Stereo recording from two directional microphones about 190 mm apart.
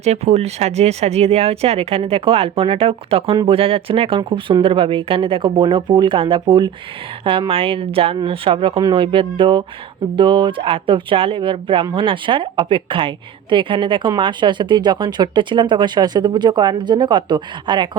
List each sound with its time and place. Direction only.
0.0 s speech: 35° right (ahead or behind)